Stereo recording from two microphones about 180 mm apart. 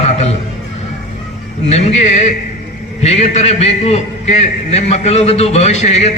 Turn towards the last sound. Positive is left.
turn(degrees=35)  # may be behind; listen again after turning